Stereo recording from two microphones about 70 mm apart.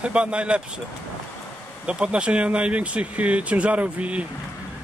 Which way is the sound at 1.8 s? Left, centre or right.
Centre.